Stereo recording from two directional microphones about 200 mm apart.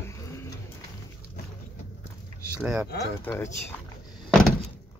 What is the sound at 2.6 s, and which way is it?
Speech, 5° right (ahead or behind).